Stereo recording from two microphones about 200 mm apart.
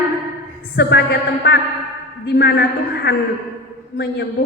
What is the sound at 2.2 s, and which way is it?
A man's voice, 50° left (ahead or behind).